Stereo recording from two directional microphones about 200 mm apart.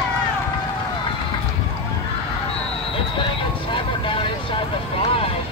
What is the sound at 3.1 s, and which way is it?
Vehicle, 25° left (ahead or behind).